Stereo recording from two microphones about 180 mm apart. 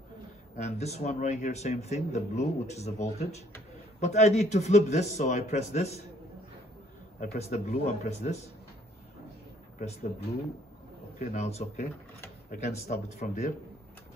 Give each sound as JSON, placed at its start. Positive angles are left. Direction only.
{"t": 0.6, "sound": "speech", "side_deg": 40}
{"t": 7.2, "sound": "speech", "side_deg": 40}
{"t": 11.1, "sound": "speech", "side_deg": 40}